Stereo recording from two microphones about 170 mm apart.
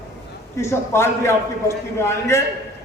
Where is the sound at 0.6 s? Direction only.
15° left (ahead or behind).